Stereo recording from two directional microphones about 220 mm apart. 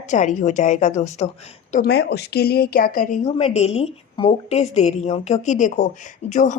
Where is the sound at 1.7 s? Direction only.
45° left (ahead or behind).